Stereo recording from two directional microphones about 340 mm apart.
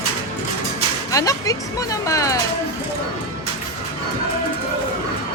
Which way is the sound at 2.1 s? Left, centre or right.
Centre.